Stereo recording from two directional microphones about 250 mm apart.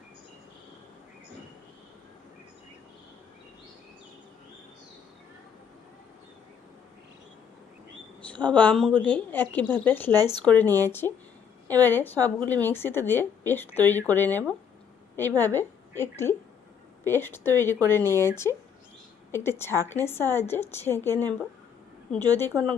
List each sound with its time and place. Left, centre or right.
8.3 s a woman's voice: centre
10.2 s speech: centre
10.4 s a woman's voice: centre
22.3 s a woman's voice: centre